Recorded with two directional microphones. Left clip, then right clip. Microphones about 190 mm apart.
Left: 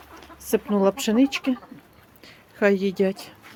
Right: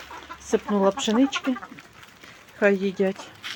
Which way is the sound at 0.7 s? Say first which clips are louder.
Even; 25° left (ahead or behind).